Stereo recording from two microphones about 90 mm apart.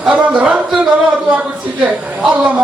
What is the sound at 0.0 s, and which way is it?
Speech, 15° right (ahead or behind).